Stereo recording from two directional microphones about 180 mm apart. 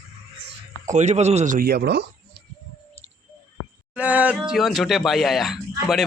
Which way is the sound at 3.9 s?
10° right (ahead or behind).